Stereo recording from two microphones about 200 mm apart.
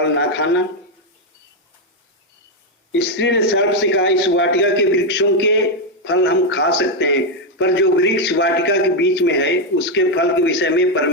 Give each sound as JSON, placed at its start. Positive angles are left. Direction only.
{"t": 0.0, "sound": "a man's voice", "side_deg": 65}
{"t": 2.9, "sound": "a man's voice", "side_deg": 65}